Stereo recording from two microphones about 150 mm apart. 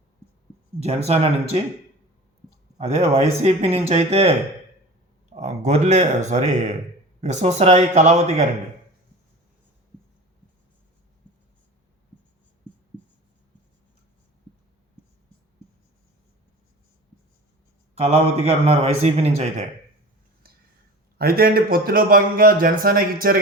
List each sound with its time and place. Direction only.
0.8 s a man's voice: 45° right (ahead or behind)
2.7 s a man's voice: 40° right (ahead or behind)
17.9 s a man's voice: 45° right (ahead or behind)
21.2 s speech: 90° right; by 23.4 s 75° right (ahead or behind)